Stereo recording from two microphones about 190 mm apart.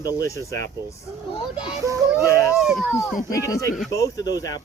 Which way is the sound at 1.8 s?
15° right (ahead or behind).